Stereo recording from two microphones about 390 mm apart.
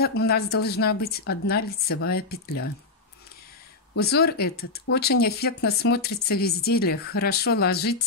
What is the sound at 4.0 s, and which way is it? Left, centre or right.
A woman's voice, left.